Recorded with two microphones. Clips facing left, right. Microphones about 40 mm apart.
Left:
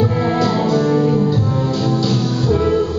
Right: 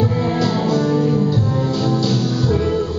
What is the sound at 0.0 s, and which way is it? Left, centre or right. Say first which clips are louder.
Music: left 2 dB; centre.